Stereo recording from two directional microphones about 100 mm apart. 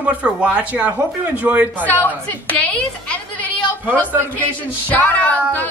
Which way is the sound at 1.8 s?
15° left (ahead or behind).